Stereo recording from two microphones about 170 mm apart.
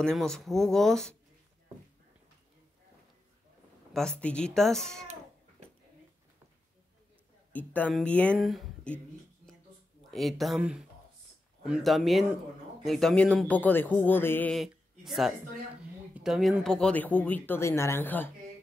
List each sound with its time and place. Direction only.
0.0 s speech: 5° left (ahead or behind)
3.9 s speech: 5° left (ahead or behind)
7.5 s speech: 10° left (ahead or behind)
10.1 s speech: centre (ahead or behind)
14.6 s speech: centre (ahead or behind)